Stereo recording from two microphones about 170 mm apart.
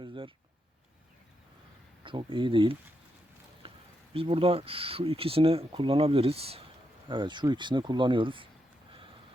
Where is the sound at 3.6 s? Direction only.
35° right (ahead or behind).